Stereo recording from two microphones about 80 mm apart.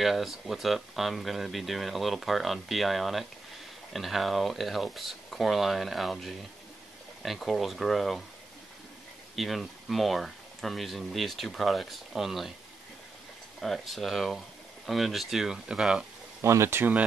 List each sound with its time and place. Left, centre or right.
0.0 s speech: centre
9.3 s speech: centre
13.6 s speech: centre
16.3 s speech: right